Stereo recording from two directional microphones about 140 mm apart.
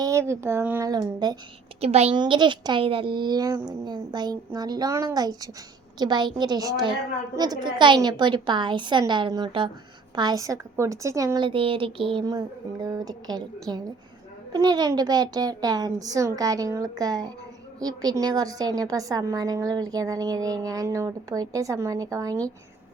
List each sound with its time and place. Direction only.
0.0 s speech: 20° right (ahead or behind)
0.9 s a woman's voice: 30° right (ahead or behind)
1.8 s a woman's voice: 45° right (ahead or behind)
2.1 s a woman's voice: 35° right (ahead or behind)
6.0 s a sound: 30° right (ahead or behind)
10.2 s a woman's voice: 25° right (ahead or behind)
11.3 s a sound: 35° right (ahead or behind)
14.5 s a woman's voice: 30° right (ahead or behind)